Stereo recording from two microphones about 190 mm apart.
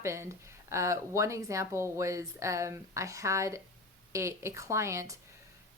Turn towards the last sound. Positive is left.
turn(degrees=-15)  # may be behind; listen again after turning